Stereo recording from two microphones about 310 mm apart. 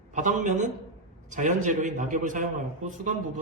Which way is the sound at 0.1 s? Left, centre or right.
Right.